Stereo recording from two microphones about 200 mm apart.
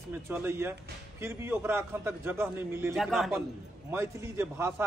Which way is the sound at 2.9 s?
Centre (ahead or behind).